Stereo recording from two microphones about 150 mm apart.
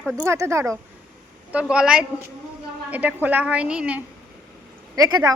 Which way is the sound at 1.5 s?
5° right (ahead or behind).